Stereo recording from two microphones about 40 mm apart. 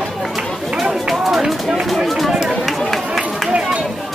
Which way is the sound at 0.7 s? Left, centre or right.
Centre.